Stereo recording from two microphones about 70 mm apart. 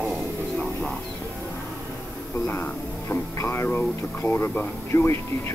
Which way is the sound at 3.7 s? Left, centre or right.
Left.